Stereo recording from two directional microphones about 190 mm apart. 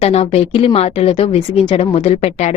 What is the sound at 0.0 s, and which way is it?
A woman's voice, 35° left (ahead or behind).